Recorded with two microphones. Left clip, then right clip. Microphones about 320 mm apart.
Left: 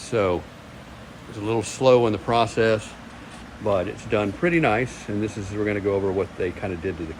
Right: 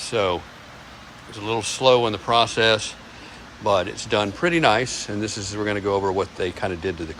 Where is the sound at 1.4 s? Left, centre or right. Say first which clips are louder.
Even; centre.